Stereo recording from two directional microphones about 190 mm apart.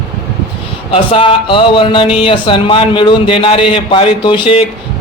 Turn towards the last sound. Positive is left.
turn(degrees=25)  # may be behind; listen again after turning